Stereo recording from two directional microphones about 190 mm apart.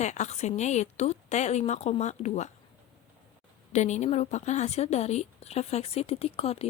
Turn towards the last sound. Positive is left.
turn(degrees=30)  # may be behind; listen again after turning